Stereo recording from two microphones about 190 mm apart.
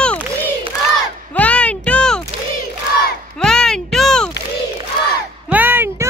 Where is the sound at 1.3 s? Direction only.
5° left (ahead or behind).